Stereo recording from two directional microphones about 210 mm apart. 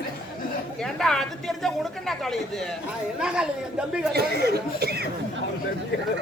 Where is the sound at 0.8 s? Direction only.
Centre (ahead or behind).